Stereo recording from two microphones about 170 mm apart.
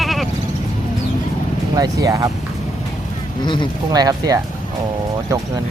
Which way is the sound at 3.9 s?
20° right (ahead or behind).